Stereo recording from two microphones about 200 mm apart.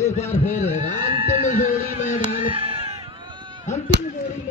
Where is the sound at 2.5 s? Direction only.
25° right (ahead or behind).